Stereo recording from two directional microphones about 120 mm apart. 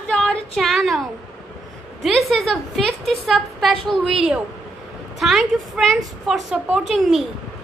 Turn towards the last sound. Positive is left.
turn(degrees=0)  # may be behind; listen again after turning